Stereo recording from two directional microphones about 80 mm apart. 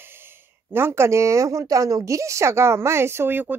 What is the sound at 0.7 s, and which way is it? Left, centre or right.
Speech, right.